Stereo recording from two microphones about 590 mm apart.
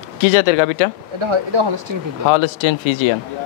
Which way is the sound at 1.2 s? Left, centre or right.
Right.